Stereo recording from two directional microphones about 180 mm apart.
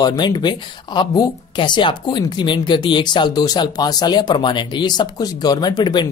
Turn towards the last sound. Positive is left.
turn(degrees=25)  # may be behind; listen again after turning